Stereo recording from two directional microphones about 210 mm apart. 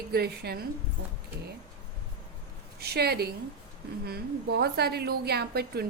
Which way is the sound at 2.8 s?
50° right (ahead or behind).